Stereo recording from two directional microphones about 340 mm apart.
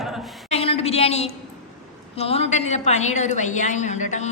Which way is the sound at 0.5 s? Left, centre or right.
Centre.